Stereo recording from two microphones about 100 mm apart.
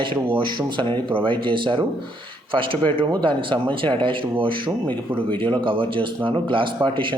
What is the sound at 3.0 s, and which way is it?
A man's voice, 55° right (ahead or behind).